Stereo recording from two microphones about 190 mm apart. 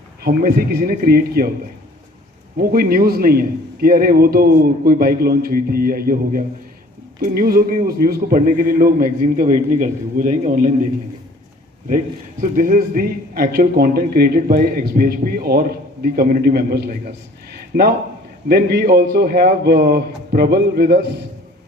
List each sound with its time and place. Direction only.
0.2 s a man's voice: 55° right (ahead or behind)
2.6 s a man's voice: 50° right (ahead or behind)
11.9 s a man's voice: 45° right (ahead or behind)